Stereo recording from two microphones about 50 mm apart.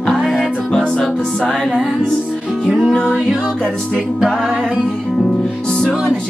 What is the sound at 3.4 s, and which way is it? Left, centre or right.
Music, centre.